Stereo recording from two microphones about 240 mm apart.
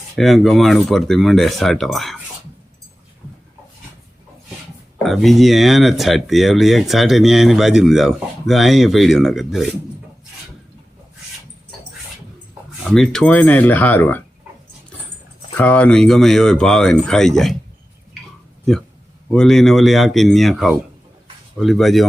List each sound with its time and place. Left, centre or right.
0.2 s speech: centre
5.0 s speech: centre
12.8 s speech: centre
15.5 s speech: centre
19.3 s speech: centre